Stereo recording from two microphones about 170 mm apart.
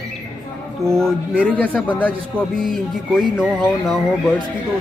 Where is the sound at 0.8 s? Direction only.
15° right (ahead or behind).